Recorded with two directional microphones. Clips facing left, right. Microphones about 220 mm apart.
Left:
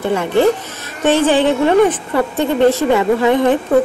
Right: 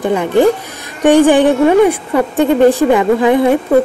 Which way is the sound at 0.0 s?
15° right (ahead or behind).